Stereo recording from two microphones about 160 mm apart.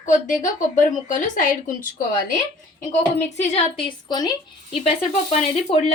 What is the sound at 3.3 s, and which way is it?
Speech, 45° left (ahead or behind).